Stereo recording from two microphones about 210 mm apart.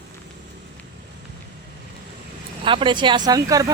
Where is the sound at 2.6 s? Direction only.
25° right (ahead or behind).